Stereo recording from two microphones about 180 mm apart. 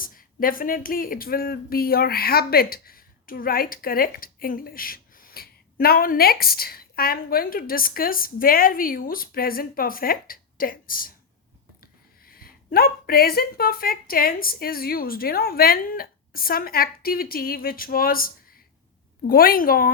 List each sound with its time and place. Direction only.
0.0 s a woman's voice: 50° left (ahead or behind)
19.3 s a woman's voice: 55° left (ahead or behind)